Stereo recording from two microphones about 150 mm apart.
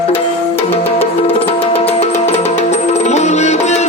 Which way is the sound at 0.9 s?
40° left (ahead or behind).